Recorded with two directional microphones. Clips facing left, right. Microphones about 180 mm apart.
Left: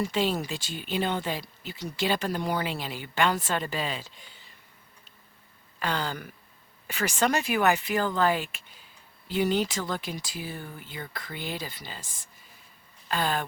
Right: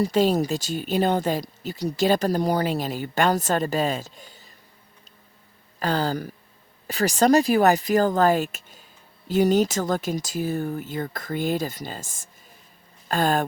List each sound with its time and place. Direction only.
0.0 s speech: 40° right (ahead or behind)
5.8 s speech: 40° right (ahead or behind)